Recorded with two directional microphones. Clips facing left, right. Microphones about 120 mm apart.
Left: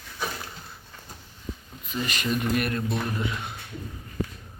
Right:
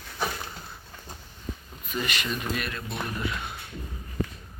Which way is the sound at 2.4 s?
55° left (ahead or behind).